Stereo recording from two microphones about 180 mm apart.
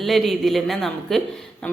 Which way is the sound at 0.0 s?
Centre (ahead or behind).